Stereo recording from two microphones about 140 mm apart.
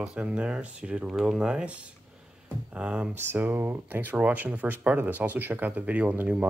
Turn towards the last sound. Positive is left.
turn(degrees=-10)  # may be behind; listen again after turning